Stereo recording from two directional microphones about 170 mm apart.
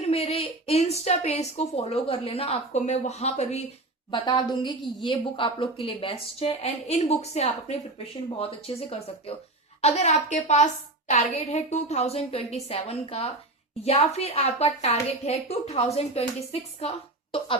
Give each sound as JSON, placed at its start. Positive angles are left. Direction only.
{"t": 0.0, "sound": "a woman's voice", "side_deg": 35}
{"t": 4.1, "sound": "a woman's voice", "side_deg": 30}